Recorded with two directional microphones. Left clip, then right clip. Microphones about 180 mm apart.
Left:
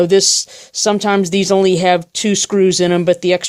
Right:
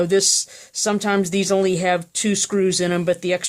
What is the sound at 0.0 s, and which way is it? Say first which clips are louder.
Speech: left 6 dB; 30° left (ahead or behind).